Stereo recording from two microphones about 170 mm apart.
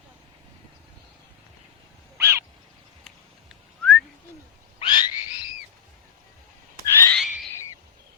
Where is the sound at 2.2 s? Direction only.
15° right (ahead or behind).